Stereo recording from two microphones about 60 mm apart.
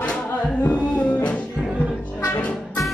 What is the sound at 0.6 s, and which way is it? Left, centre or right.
Music, left.